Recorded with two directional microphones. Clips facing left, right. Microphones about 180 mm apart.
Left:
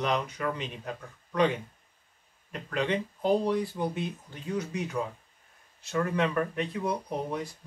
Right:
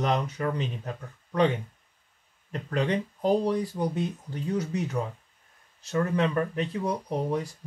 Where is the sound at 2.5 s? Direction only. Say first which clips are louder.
Right 2 dB; 35° right (ahead or behind).